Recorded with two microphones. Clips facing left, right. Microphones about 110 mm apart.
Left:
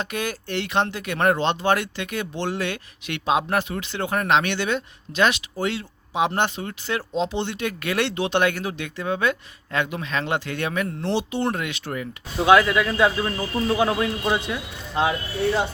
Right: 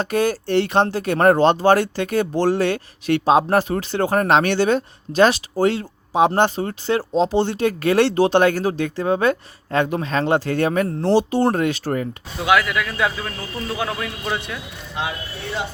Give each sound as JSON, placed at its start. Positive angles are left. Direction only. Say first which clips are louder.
{"t": 0.0, "sound": "speech", "louder": "right 8 dB", "side_deg": -35}
{"t": 12.5, "sound": "a man's voice", "louder": "left 2 dB", "side_deg": 25}